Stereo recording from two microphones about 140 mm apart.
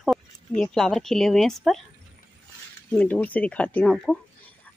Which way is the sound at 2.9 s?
10° left (ahead or behind).